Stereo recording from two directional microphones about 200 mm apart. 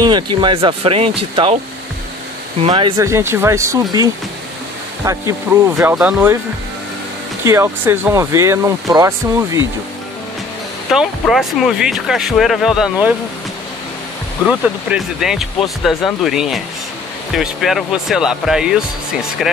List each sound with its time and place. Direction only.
0.0 s speech: 20° right (ahead or behind)
2.6 s speech: 25° right (ahead or behind)
3.0 s speech: 15° right (ahead or behind)
7.4 s speech: 10° right (ahead or behind)
10.9 s speech: centre (ahead or behind)
14.4 s speech: 5° right (ahead or behind)